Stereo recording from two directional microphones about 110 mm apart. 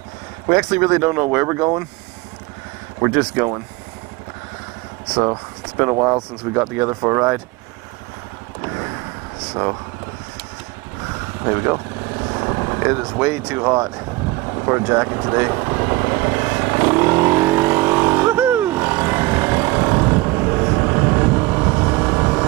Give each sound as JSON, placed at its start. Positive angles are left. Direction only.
{"t": 0.6, "sound": "speech", "side_deg": -15}
{"t": 3.0, "sound": "speech", "side_deg": -25}
{"t": 5.2, "sound": "speech", "side_deg": -30}
{"t": 11.4, "sound": "speech", "side_deg": -25}
{"t": 12.4, "sound": "vehicle", "side_deg": -25}
{"t": 13.6, "sound": "speech", "side_deg": -30}
{"t": 14.5, "sound": "vehicle", "side_deg": -25}